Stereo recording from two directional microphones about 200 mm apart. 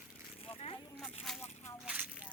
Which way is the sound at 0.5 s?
30° left (ahead or behind).